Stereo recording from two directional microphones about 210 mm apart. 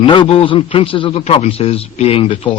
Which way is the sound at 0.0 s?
25° left (ahead or behind).